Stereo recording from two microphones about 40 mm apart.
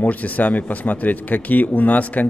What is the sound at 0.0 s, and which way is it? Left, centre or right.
Speech, left.